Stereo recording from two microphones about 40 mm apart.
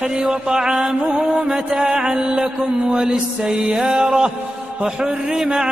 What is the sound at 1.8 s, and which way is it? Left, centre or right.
Mantra, right.